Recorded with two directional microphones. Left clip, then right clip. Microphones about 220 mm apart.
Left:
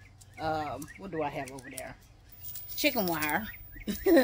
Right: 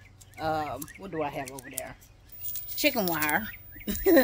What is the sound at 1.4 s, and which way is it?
Speech, 25° right (ahead or behind).